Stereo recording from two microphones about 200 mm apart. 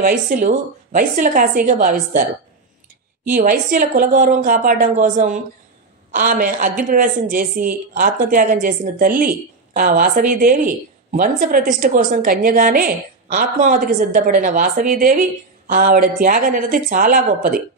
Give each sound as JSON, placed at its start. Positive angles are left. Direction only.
{"t": 0.0, "sound": "a woman's voice", "side_deg": -45}
{"t": 3.3, "sound": "a woman's voice", "side_deg": -45}